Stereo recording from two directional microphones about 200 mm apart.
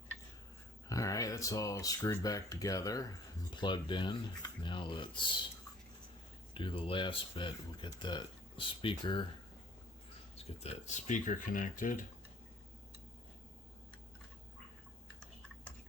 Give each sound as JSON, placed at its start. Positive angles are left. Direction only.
{"t": 0.9, "sound": "speech", "side_deg": 15}
{"t": 6.5, "sound": "speech", "side_deg": 25}
{"t": 10.3, "sound": "speech", "side_deg": 30}